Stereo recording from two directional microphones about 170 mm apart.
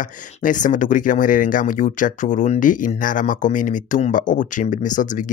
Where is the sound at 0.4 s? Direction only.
50° left (ahead or behind).